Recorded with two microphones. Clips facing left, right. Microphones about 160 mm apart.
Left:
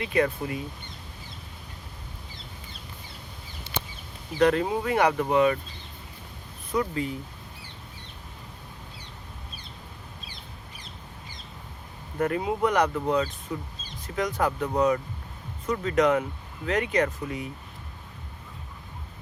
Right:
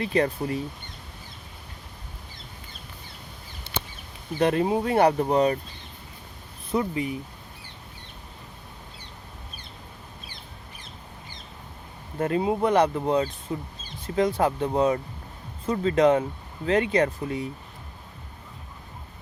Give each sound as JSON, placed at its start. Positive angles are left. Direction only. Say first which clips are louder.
{"t": 0.0, "sound": "speech", "louder": "right 1 dB", "side_deg": -35}
{"t": 4.4, "sound": "speech", "louder": "even", "side_deg": -25}
{"t": 6.7, "sound": "speech", "louder": "right 1 dB", "side_deg": -20}
{"t": 12.2, "sound": "speech", "louder": "right 2 dB", "side_deg": -25}